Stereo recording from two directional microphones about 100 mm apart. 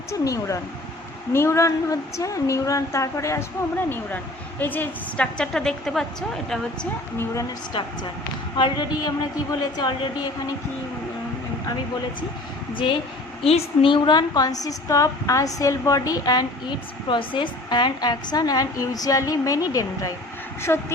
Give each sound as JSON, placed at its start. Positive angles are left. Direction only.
{"t": 0.1, "sound": "a woman's voice", "side_deg": 30}
{"t": 8.5, "sound": "a woman's voice", "side_deg": 50}
{"t": 12.7, "sound": "a woman's voice", "side_deg": 55}
{"t": 13.4, "sound": "a woman's voice", "side_deg": 75}
{"t": 13.9, "sound": "a woman's voice", "side_deg": 45}